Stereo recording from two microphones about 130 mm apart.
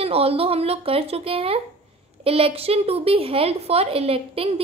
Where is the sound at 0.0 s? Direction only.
50° right (ahead or behind).